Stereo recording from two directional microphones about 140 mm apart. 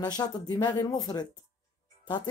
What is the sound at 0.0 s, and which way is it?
Speech, 30° left (ahead or behind).